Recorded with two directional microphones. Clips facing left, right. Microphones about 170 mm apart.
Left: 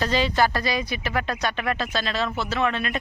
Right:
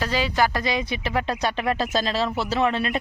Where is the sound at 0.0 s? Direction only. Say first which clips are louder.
Left 1 dB; 10° right (ahead or behind).